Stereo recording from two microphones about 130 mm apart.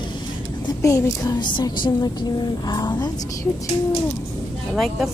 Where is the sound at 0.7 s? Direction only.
25° left (ahead or behind).